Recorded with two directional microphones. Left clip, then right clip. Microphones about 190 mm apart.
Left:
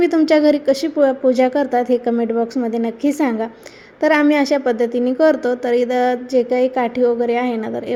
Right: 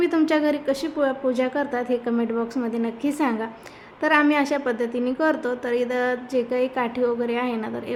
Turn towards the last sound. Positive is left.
turn(degrees=15)  # may be behind; listen again after turning